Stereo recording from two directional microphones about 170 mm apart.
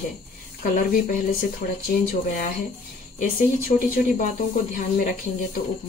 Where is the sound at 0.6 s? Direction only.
55° left (ahead or behind).